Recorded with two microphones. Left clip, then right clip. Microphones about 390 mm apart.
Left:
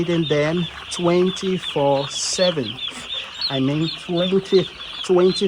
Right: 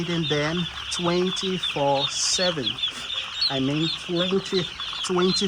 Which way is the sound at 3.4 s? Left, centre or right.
Left.